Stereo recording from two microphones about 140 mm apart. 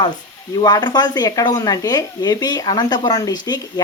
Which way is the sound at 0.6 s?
30° left (ahead or behind).